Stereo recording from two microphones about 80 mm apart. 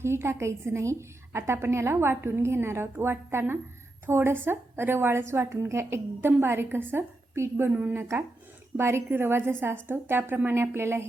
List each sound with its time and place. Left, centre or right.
0.0 s a woman's voice: right